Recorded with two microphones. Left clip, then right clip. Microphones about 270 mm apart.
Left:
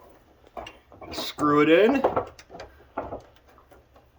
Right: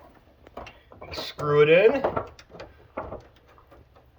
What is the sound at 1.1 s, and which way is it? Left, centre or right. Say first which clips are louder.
Speech: left 2 dB; left.